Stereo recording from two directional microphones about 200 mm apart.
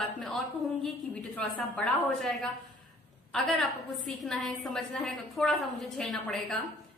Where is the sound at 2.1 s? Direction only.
Centre (ahead or behind).